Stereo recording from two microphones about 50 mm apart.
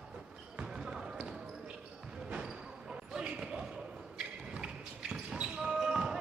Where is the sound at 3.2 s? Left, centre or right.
Centre.